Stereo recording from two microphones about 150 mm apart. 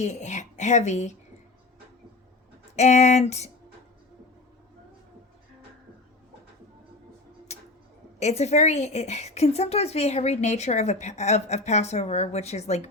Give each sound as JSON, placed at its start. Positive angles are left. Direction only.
{"t": 0.0, "sound": "a woman's voice", "side_deg": 50}
{"t": 2.7, "sound": "a woman's voice", "side_deg": 50}
{"t": 7.5, "sound": "tick-tock", "side_deg": 45}
{"t": 8.2, "sound": "a woman's voice", "side_deg": 45}